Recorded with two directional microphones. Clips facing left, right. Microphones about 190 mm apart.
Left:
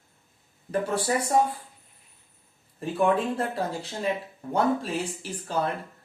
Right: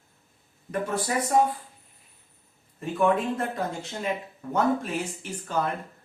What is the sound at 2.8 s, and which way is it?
Speech, 35° left (ahead or behind).